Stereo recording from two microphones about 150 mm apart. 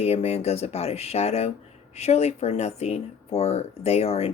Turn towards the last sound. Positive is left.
turn(degrees=40)  # may be behind; listen again after turning